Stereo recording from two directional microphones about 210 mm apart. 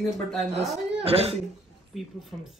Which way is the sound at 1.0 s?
30° right (ahead or behind).